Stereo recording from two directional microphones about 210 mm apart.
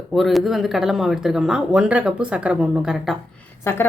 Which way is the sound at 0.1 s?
Centre (ahead or behind).